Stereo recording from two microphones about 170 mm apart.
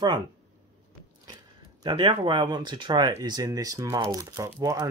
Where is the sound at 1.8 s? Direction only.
30° right (ahead or behind).